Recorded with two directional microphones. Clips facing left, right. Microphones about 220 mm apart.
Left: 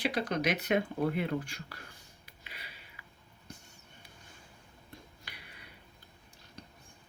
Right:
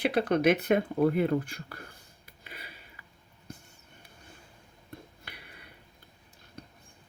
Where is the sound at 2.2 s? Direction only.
50° right (ahead or behind).